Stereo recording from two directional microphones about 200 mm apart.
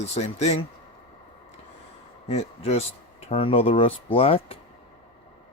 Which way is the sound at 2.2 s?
35° left (ahead or behind).